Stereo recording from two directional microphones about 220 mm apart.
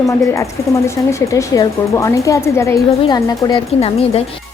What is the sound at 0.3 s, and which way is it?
Speech, 15° left (ahead or behind).